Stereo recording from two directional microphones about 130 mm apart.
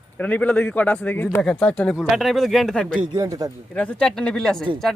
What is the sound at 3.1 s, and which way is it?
Speech, 25° right (ahead or behind).